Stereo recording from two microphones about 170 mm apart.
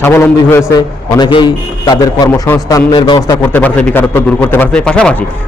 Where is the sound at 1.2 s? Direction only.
25° left (ahead or behind).